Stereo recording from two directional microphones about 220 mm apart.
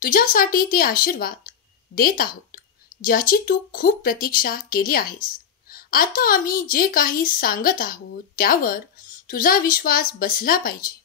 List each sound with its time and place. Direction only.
0.0 s speech: 40° left (ahead or behind)